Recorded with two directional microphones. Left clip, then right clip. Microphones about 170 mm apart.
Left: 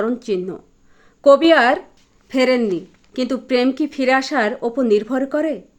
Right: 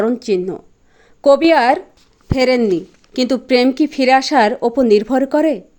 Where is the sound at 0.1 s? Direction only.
25° right (ahead or behind).